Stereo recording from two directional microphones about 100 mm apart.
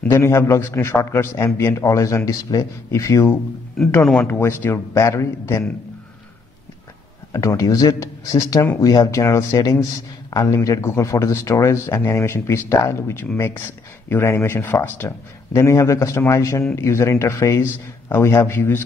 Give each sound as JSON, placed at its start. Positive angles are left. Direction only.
{"t": 0.0, "sound": "a man's voice", "side_deg": 25}
{"t": 4.0, "sound": "speech", "side_deg": 5}
{"t": 4.3, "sound": "a man's voice", "side_deg": 20}
{"t": 7.3, "sound": "a man's voice", "side_deg": 35}